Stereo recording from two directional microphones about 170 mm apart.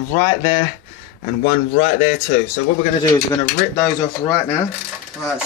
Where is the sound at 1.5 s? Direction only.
45° left (ahead or behind).